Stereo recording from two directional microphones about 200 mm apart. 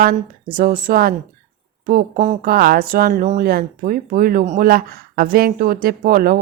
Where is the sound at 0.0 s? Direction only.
45° right (ahead or behind).